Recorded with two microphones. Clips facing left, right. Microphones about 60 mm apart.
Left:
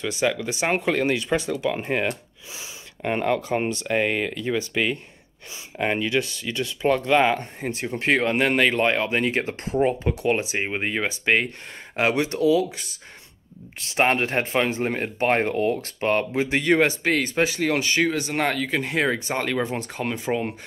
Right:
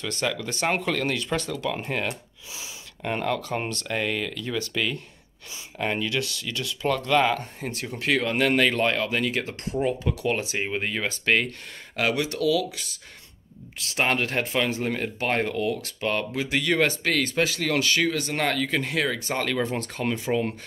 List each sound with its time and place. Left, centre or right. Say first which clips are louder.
0.0 s speech: left 4 dB; centre
18.9 s speech: left 3 dB; left
20.2 s speech: even; left